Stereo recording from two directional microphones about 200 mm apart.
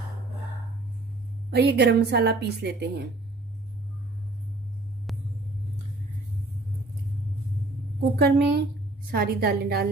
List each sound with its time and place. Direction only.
1.5 s a woman's voice: 55° right (ahead or behind)
8.0 s a woman's voice: 55° right (ahead or behind)